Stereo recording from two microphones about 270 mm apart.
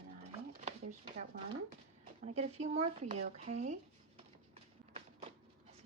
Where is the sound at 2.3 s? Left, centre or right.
Right.